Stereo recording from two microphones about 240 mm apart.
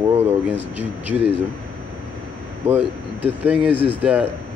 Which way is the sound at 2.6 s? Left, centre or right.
Right.